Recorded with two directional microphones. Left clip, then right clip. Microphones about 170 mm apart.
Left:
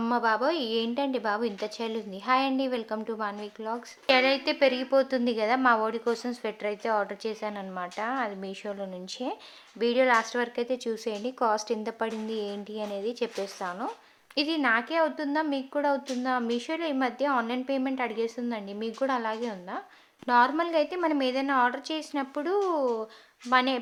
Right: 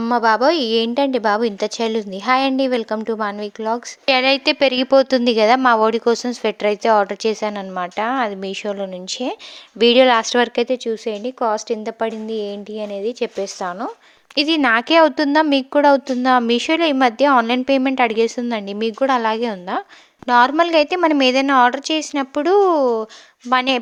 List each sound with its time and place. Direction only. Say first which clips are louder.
0.1 s a woman's voice: right 11 dB; 50° right (ahead or behind)
10.8 s a woman's voice: right 9 dB; 30° right (ahead or behind)
14.3 s a woman's voice: right 10 dB; 50° right (ahead or behind)
20.2 s a woman's voice: right 10 dB; 45° right (ahead or behind)